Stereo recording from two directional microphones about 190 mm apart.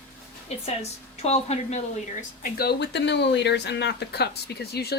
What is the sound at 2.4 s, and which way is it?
A woman's voice, 55° left (ahead or behind).